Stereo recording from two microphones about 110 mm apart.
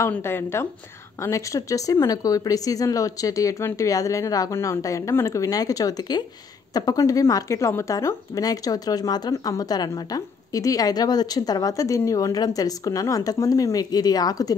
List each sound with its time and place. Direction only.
0.1 s a woman's voice: 20° left (ahead or behind); by 14.5 s 35° left (ahead or behind)